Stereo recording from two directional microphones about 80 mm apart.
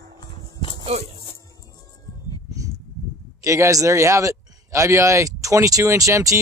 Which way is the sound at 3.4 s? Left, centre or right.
Right.